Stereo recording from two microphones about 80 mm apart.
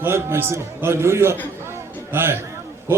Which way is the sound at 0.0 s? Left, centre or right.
Right.